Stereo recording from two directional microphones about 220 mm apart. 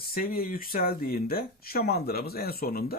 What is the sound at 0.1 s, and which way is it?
Speech, 40° left (ahead or behind).